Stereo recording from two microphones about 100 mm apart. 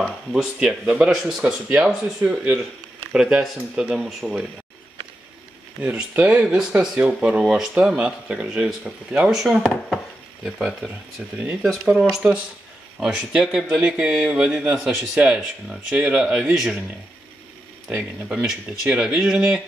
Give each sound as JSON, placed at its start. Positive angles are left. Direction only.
{"t": 0.0, "sound": "speech", "side_deg": -5}
{"t": 1.4, "sound": "speech", "side_deg": -15}
{"t": 5.8, "sound": "speech", "side_deg": -10}
{"t": 17.8, "sound": "speech", "side_deg": -5}